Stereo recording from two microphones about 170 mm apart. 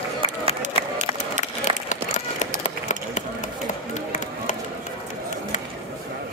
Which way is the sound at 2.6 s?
45° left (ahead or behind).